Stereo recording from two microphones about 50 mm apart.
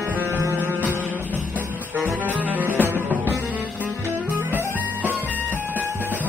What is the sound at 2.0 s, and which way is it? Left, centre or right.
Music, right.